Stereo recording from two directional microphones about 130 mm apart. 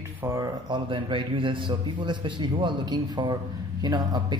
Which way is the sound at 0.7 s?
40° right (ahead or behind).